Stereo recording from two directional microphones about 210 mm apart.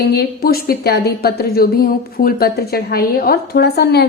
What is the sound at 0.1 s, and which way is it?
A woman's voice, 45° left (ahead or behind).